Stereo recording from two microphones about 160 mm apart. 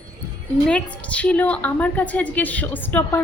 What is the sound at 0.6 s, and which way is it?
A woman's voice, 5° left (ahead or behind).